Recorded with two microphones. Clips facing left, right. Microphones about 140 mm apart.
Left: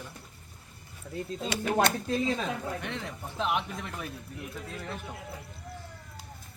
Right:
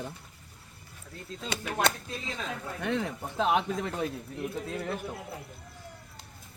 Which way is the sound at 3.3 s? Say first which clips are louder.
Right 4 dB; 35° right (ahead or behind).